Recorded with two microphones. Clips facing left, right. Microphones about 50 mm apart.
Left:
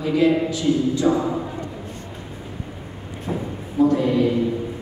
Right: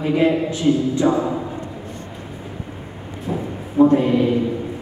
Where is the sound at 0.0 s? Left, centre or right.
Right.